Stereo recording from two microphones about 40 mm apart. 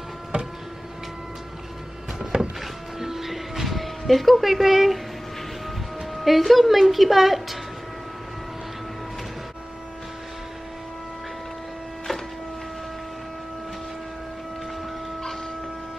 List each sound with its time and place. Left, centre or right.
0.3 s a sound: right
2.3 s music: right
3.0 s music: centre
6.1 s a woman's voice: centre